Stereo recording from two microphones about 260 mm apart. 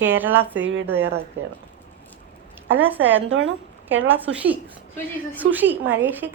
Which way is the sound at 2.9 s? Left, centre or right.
Centre.